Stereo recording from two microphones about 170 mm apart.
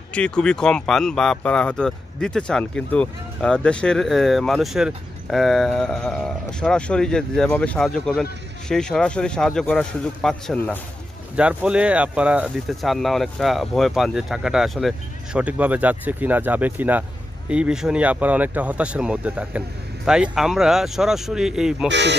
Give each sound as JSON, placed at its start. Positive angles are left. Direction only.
{"t": 0.1, "sound": "speech", "side_deg": 5}
{"t": 11.3, "sound": "speech", "side_deg": -5}
{"t": 21.8, "sound": "speech", "side_deg": -90}